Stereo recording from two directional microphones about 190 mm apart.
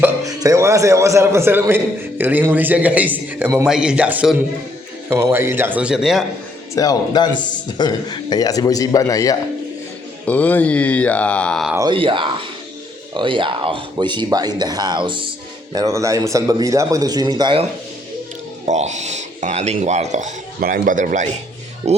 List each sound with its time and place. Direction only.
0.0 s a man's voice: 20° right (ahead or behind); by 6.2 s centre (ahead or behind)
6.7 s a man's voice: 20° left (ahead or behind); by 11.7 s 5° left (ahead or behind)
11.9 s speech: 25° right (ahead or behind)
18.7 s speech: 40° right (ahead or behind)